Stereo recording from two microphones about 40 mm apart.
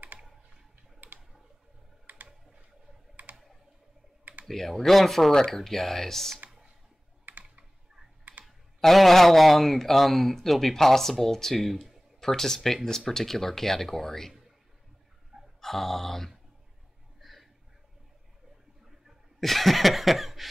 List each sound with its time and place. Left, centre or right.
1.0 s a sound: right
2.1 s computer keyboard: right
4.2 s typing: right
4.5 s speech: centre
7.2 s computer keyboard: right
8.5 s speech: centre
12.2 s speech: centre
15.6 s speech: centre
17.2 s a sound: centre
19.4 s a sound: centre